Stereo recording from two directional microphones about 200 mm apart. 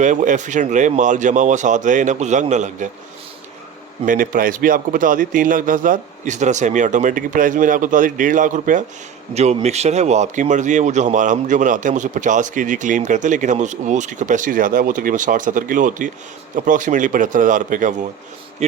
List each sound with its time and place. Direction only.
0.0 s speech: 40° right (ahead or behind)
4.0 s speech: 40° right (ahead or behind)